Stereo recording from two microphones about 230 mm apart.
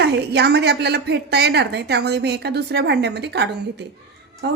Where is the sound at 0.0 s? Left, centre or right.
Right.